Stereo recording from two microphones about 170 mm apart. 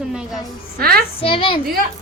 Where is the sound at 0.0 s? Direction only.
5° right (ahead or behind).